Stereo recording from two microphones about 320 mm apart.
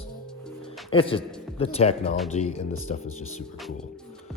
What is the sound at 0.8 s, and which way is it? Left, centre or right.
A man's voice, centre.